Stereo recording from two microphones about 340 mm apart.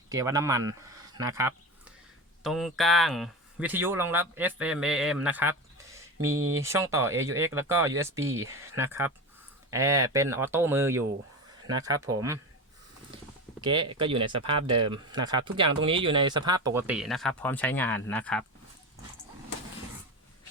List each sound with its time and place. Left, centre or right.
0.1 s speech: centre
13.6 s speech: centre
14.7 s speech: right
15.1 s speech: centre